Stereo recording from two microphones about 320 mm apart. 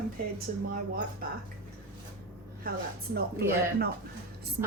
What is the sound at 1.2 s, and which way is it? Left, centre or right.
Speech, right.